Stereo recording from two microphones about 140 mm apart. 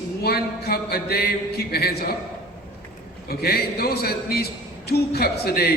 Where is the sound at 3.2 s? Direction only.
90° left.